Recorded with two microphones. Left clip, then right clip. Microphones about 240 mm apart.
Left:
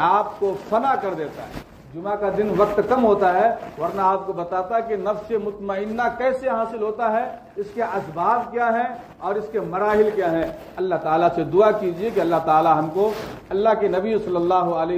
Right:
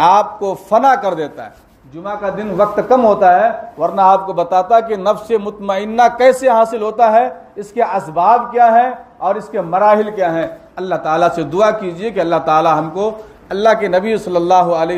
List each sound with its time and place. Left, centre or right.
0.0 s a man's voice: right